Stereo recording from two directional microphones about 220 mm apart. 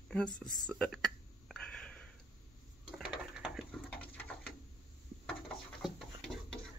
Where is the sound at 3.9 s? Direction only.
5° left (ahead or behind).